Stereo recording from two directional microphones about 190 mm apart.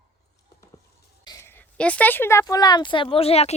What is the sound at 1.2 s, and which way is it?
Speech, 20° left (ahead or behind).